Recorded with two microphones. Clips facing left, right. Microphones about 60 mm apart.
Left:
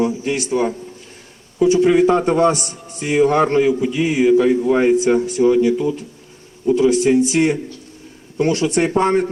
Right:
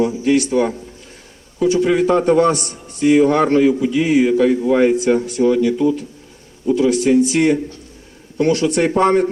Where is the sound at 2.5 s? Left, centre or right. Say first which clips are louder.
Right 1 dB; right.